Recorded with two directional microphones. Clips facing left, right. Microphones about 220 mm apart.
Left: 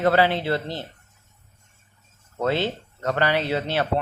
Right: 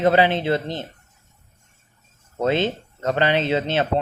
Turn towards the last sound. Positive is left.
turn(degrees=-20)  # may be behind; listen again after turning